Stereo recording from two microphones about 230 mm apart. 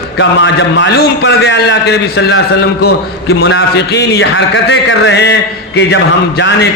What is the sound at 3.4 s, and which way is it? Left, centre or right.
A man's voice, left.